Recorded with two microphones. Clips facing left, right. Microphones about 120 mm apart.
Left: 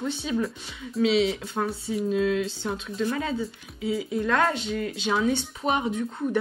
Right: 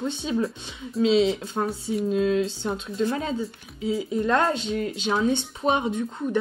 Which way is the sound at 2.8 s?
25° right (ahead or behind).